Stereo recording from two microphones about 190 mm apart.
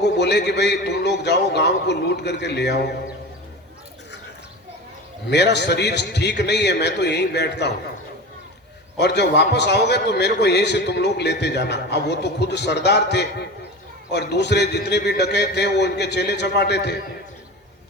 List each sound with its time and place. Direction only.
0.0 s a man's voice: 65° left (ahead or behind)
5.3 s a man's voice: 65° left (ahead or behind)
9.0 s a man's voice: 60° left (ahead or behind)